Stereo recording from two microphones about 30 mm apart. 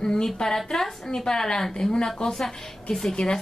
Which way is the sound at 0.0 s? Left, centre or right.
Left.